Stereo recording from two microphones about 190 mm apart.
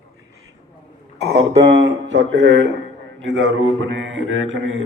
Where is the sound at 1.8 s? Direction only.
80° right.